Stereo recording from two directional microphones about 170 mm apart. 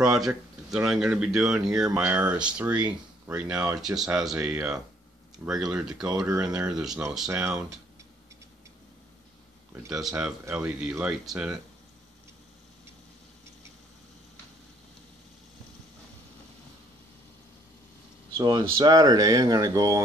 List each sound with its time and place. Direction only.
0.0 s speech: 5° right (ahead or behind)
9.9 s speech: 5° right (ahead or behind)
18.4 s speech: 25° right (ahead or behind)